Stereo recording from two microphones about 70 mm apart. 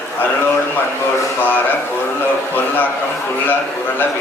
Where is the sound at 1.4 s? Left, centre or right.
Left.